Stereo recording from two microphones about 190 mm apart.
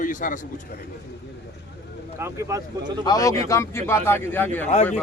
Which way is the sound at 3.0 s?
20° left (ahead or behind).